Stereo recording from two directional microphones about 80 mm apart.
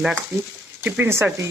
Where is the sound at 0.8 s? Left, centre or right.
Right.